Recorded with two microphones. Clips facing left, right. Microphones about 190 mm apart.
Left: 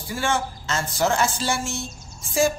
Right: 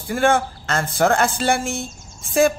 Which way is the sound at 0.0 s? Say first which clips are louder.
Right 7 dB; 55° right (ahead or behind).